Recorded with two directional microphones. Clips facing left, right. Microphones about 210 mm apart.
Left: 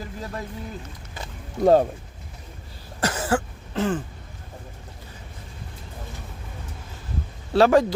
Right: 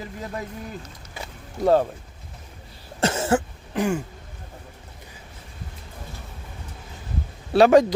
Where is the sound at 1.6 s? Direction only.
25° left (ahead or behind).